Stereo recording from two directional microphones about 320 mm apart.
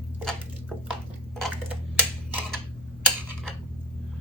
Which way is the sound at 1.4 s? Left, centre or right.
Centre.